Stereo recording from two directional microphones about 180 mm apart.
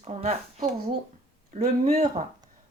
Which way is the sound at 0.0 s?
35° right (ahead or behind).